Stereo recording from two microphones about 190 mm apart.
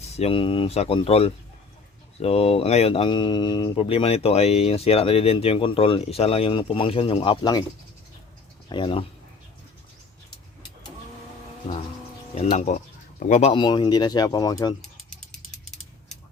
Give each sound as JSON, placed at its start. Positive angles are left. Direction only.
{"t": 0.0, "sound": "speech", "side_deg": 30}
{"t": 8.7, "sound": "speech", "side_deg": 30}
{"t": 12.3, "sound": "speech", "side_deg": 35}
{"t": 13.5, "sound": "speech", "side_deg": 25}